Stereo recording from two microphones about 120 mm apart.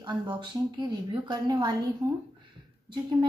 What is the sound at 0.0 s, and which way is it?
A woman's voice, 40° right (ahead or behind).